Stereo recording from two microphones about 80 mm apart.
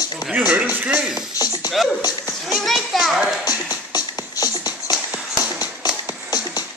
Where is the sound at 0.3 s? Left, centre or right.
Centre.